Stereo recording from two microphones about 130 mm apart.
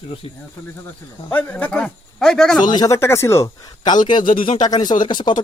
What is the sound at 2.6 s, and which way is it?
Speech, 30° left (ahead or behind).